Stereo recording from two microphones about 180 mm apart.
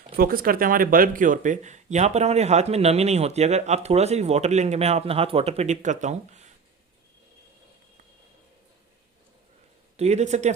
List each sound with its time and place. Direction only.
0.2 s speech: 55° right (ahead or behind)
10.0 s speech: 40° right (ahead or behind)